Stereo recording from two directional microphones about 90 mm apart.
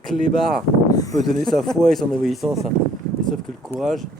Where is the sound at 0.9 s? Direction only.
40° left (ahead or behind).